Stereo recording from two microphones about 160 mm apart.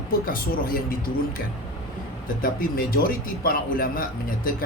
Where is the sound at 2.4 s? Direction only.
60° left (ahead or behind).